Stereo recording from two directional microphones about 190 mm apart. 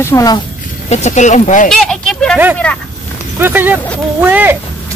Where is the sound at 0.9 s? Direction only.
40° left (ahead or behind).